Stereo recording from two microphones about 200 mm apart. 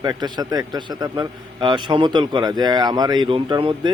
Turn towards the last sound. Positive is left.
turn(degrees=-25)  # may be behind; listen again after turning